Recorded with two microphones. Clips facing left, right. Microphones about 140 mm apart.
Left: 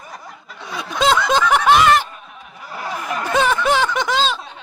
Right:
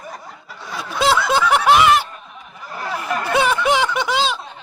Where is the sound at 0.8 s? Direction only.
10° right (ahead or behind).